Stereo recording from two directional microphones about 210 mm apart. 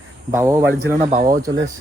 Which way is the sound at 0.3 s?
15° right (ahead or behind).